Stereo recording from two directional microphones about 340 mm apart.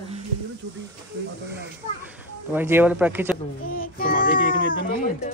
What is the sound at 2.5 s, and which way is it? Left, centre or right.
Speech, centre.